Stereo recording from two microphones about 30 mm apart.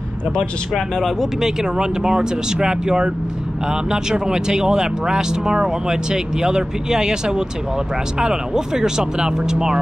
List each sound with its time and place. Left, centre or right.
0.7 s speech: centre
1.4 s speech: right